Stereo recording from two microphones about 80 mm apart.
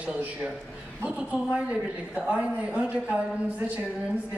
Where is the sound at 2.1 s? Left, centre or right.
Centre.